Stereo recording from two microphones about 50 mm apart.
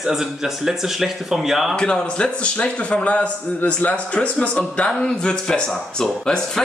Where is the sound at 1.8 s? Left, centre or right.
Centre.